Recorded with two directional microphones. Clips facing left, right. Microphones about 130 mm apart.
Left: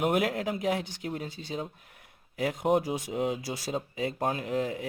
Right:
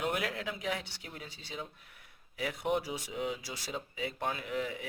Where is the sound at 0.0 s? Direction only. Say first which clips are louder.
Left 7 dB; 45° left (ahead or behind).